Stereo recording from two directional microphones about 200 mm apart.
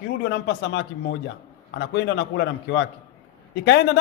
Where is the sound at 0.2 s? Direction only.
55° left (ahead or behind).